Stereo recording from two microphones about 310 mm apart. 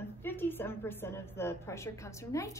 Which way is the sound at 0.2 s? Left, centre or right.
Centre.